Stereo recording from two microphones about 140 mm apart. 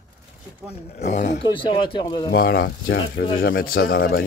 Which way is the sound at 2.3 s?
90° left.